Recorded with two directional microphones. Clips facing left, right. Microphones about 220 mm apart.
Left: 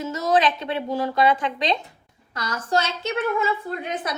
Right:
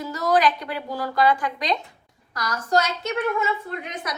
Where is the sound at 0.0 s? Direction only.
25° left (ahead or behind).